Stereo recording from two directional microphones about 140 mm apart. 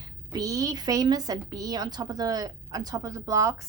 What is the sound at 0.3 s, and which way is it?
A woman's voice, 25° right (ahead or behind).